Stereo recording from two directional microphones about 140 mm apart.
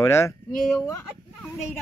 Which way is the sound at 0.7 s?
10° left (ahead or behind).